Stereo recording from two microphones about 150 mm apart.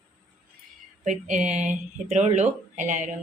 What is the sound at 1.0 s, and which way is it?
Speech, 55° right (ahead or behind).